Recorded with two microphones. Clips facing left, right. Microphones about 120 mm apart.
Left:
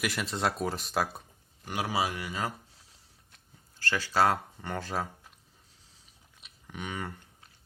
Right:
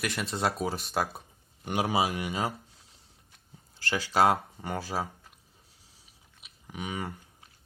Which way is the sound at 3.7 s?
15° right (ahead or behind).